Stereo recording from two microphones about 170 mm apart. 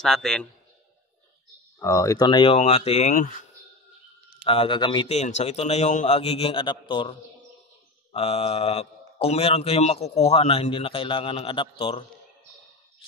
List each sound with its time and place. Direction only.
0.0 s a man's voice: 5° left (ahead or behind)
1.8 s a man's voice: 20° left (ahead or behind); by 3.3 s 45° left (ahead or behind)
4.5 s a man's voice: 30° left (ahead or behind)